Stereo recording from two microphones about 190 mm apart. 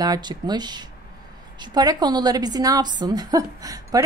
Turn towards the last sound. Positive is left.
turn(degrees=-20)  # may be behind; listen again after turning